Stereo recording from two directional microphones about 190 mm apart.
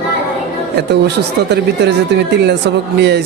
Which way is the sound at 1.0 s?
65° right (ahead or behind).